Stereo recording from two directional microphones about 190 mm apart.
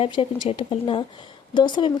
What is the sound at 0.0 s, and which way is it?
A woman's voice, 30° left (ahead or behind).